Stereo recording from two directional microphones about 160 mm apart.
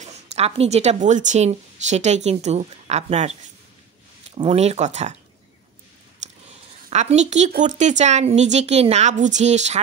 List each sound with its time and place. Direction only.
0.0 s a woman's voice: 45° right (ahead or behind)
4.5 s a woman's voice: 40° right (ahead or behind)
6.2 s a sound: 50° right (ahead or behind)
6.9 s a woman's voice: 45° right (ahead or behind)